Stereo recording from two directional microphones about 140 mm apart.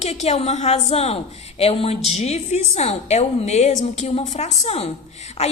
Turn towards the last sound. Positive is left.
turn(degrees=50)  # may be behind; listen again after turning